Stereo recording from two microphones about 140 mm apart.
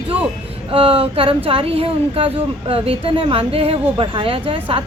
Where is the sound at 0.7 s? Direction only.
40° right (ahead or behind).